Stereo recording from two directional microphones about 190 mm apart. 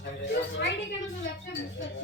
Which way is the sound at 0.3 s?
70° left (ahead or behind).